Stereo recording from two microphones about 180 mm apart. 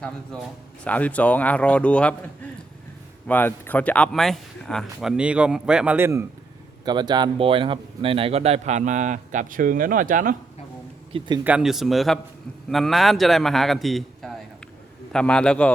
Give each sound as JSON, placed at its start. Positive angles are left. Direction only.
{"t": 0.0, "sound": "a man's voice", "side_deg": 5}
{"t": 6.8, "sound": "speech", "side_deg": -25}
{"t": 11.4, "sound": "speech", "side_deg": -5}